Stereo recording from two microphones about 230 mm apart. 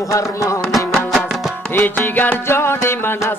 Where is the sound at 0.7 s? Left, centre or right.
Centre.